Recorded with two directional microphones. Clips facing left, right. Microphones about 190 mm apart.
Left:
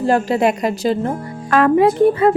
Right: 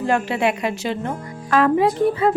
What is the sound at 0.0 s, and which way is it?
A woman's voice, 35° left (ahead or behind).